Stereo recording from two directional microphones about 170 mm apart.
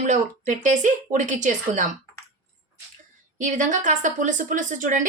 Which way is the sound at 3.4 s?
50° right (ahead or behind).